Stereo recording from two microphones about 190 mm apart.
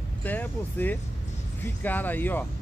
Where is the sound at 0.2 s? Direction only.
10° left (ahead or behind).